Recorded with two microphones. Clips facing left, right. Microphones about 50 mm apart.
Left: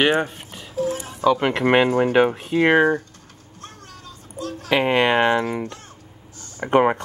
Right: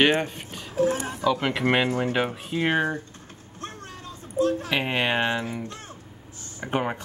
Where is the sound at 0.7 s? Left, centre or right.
Right.